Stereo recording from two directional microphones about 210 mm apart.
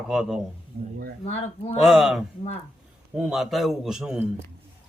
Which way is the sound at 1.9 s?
Centre (ahead or behind).